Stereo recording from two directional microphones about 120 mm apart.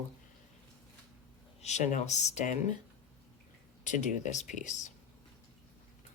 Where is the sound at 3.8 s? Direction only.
90° left.